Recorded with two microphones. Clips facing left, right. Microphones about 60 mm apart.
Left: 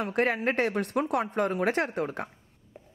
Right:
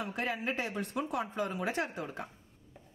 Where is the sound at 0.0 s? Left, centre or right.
Left.